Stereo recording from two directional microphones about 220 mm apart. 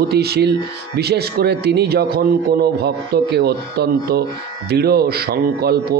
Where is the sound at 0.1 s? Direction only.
45° right (ahead or behind).